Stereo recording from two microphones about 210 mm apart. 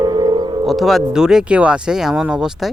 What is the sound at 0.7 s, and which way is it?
Speech, centre (ahead or behind).